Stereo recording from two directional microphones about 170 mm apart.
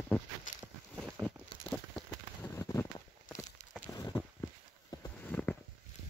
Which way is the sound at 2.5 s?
15° left (ahead or behind).